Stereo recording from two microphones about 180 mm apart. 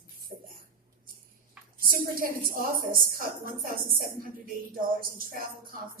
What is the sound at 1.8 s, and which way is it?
A woman's voice, 50° right (ahead or behind).